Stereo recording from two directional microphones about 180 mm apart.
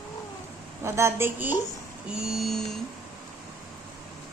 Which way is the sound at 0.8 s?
15° right (ahead or behind).